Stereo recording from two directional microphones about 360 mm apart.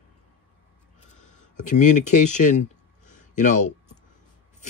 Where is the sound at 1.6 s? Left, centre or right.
Left.